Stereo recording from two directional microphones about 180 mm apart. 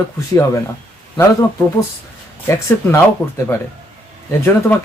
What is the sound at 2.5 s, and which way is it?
Speech, 15° left (ahead or behind).